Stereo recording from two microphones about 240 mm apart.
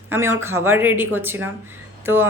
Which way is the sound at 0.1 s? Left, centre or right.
Centre.